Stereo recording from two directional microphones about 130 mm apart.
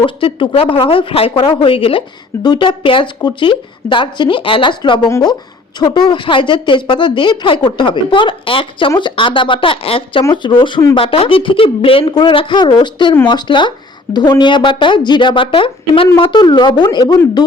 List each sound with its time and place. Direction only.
0.0 s speech: 45° left (ahead or behind)